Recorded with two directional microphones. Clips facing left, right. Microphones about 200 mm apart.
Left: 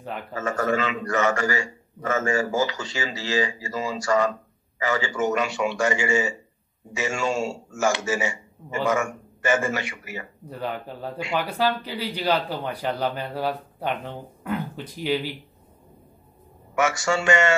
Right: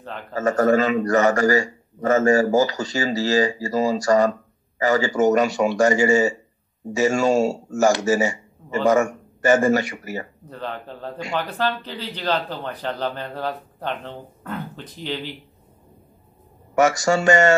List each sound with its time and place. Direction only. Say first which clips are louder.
0.3 s a man's voice: right 7 dB; 40° right (ahead or behind)
10.5 s speech: left 1 dB; 10° left (ahead or behind)
16.7 s a man's voice: right 5 dB; 40° right (ahead or behind)